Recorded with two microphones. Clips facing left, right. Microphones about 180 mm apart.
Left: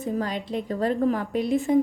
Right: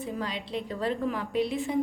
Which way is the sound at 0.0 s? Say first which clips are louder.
Left 6 dB; 45° left (ahead or behind).